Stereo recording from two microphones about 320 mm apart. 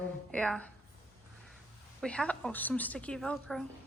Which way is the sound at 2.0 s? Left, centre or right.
Centre.